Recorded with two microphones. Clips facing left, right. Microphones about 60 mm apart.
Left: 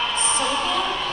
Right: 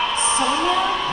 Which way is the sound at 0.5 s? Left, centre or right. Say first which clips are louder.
Right 4 dB; centre.